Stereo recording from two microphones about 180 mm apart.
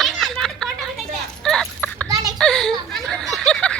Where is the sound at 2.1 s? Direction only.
20° right (ahead or behind).